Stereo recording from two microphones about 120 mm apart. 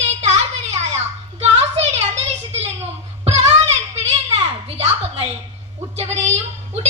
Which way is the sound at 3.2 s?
60° right (ahead or behind).